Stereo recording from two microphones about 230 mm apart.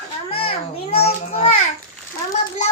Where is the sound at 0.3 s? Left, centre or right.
Left.